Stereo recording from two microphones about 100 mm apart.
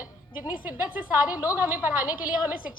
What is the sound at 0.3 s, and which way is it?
A woman's voice, 20° right (ahead or behind).